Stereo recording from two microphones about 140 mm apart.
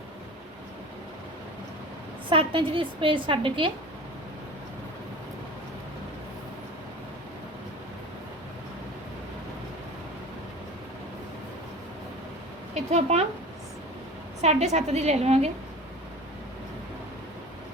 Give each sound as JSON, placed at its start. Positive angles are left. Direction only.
{"t": 2.3, "sound": "a woman's voice", "side_deg": -40}
{"t": 12.7, "sound": "speech", "side_deg": -50}
{"t": 14.4, "sound": "a woman's voice", "side_deg": -55}